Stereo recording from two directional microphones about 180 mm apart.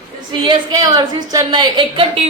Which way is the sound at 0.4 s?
25° right (ahead or behind).